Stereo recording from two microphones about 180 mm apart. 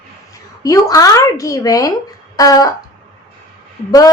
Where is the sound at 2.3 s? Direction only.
20° left (ahead or behind).